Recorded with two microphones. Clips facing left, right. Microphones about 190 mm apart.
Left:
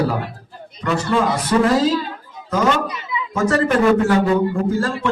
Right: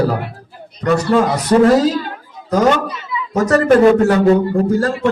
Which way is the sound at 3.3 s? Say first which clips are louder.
Right 6 dB; 40° right (ahead or behind).